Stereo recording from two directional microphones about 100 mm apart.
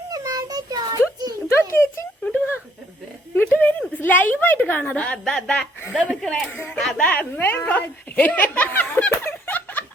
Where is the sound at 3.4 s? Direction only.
20° left (ahead or behind).